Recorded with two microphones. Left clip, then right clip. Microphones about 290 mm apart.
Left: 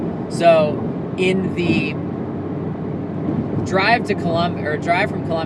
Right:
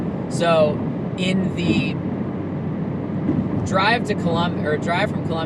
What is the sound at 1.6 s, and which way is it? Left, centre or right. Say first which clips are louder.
Speech: even; right.